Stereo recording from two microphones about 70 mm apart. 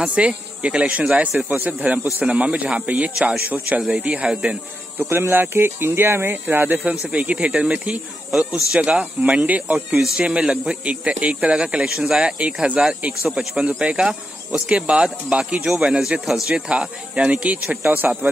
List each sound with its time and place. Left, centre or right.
0.0 s speech: centre
5.1 s speech: right